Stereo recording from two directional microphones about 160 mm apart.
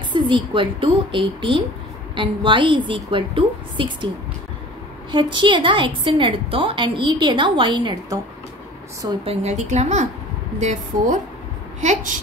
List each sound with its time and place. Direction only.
0.1 s a woman's voice: 30° right (ahead or behind)
5.1 s a woman's voice: 30° right (ahead or behind)
9.2 s a woman's voice: 40° right (ahead or behind)